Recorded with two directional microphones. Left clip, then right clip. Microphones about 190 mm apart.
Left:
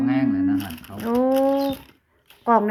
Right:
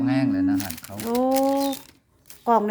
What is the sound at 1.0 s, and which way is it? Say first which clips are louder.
Speech: left 2 dB; 5° right (ahead or behind).